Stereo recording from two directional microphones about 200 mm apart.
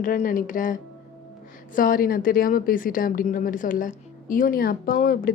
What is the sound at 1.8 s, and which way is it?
A woman's voice, 45° left (ahead or behind).